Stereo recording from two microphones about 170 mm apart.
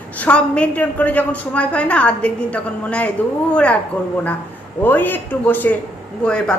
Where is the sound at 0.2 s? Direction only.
5° left (ahead or behind).